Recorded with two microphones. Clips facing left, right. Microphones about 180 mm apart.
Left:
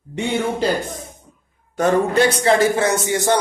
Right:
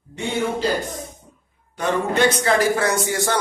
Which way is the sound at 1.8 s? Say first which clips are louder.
Left 4 dB; 45° left (ahead or behind).